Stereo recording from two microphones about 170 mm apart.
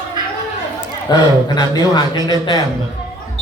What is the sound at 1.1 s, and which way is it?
A man's voice, 25° left (ahead or behind).